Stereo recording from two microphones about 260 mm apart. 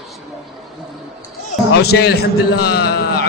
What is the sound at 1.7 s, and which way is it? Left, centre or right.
A man's voice, left.